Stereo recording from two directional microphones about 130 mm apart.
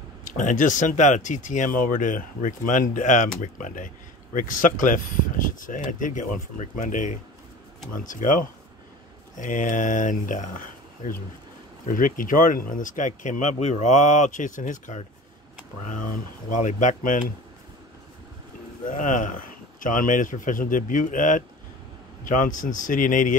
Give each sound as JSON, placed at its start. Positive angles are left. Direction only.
{"t": 0.4, "sound": "speech", "side_deg": 80}
{"t": 9.3, "sound": "speech", "side_deg": 80}
{"t": 16.6, "sound": "speech", "side_deg": 80}
{"t": 18.9, "sound": "speech", "side_deg": 90}